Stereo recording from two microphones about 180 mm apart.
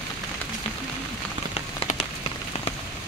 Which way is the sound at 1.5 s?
35° left (ahead or behind).